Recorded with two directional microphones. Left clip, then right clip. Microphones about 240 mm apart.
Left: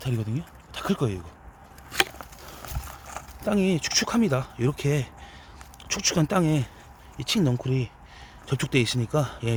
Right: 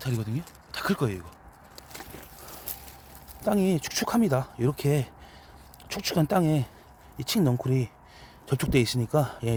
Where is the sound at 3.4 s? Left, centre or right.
Centre.